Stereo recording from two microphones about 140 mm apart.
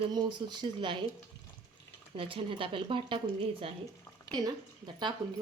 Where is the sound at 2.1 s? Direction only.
40° right (ahead or behind).